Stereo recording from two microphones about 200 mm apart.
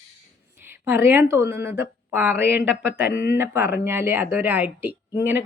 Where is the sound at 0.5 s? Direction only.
10° right (ahead or behind).